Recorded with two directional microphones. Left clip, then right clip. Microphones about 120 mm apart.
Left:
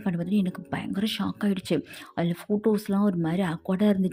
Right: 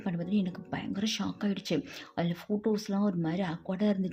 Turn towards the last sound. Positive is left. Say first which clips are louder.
# left 6 dB
turn(degrees=40)  # may be behind; listen again after turning